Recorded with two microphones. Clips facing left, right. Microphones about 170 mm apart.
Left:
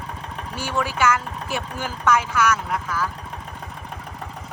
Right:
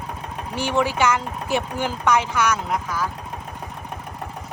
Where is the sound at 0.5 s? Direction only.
20° right (ahead or behind).